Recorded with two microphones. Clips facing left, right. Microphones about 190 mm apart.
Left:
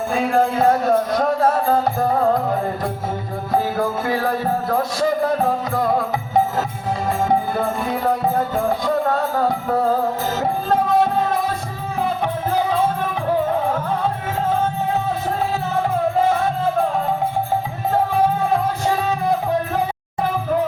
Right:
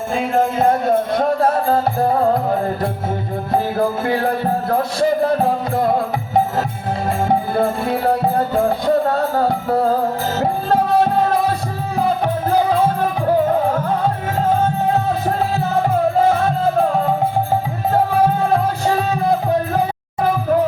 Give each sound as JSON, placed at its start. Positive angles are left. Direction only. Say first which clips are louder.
{"t": 0.1, "sound": "music", "louder": "right 1 dB", "side_deg": -25}
{"t": 3.5, "sound": "music", "louder": "right 2 dB", "side_deg": -25}
{"t": 7.3, "sound": "music", "louder": "right 4 dB", "side_deg": -30}